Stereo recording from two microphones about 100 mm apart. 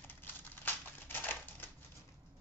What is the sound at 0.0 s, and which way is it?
Typewriter, 20° left (ahead or behind).